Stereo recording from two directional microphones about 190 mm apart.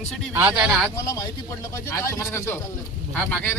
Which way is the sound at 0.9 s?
15° left (ahead or behind).